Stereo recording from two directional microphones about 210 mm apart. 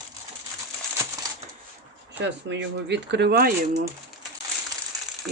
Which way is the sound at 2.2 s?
55° right (ahead or behind).